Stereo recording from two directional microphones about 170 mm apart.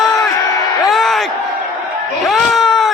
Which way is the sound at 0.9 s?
Centre (ahead or behind).